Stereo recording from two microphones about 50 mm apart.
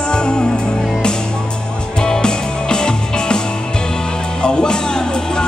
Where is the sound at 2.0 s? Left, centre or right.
Centre.